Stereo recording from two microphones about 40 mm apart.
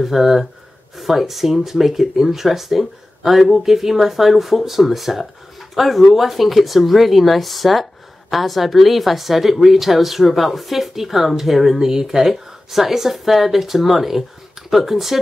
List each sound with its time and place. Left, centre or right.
0.0 s a woman's voice: centre